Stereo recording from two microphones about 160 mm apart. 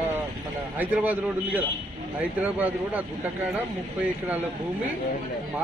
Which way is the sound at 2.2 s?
10° right (ahead or behind).